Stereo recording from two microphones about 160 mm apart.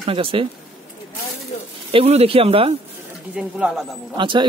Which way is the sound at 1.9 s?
40° right (ahead or behind).